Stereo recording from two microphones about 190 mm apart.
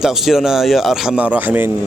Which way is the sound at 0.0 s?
Centre (ahead or behind).